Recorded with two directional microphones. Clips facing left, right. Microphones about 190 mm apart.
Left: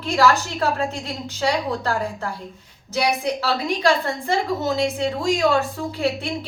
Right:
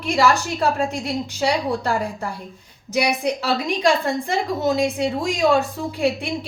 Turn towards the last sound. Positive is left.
turn(degrees=-15)  # may be behind; listen again after turning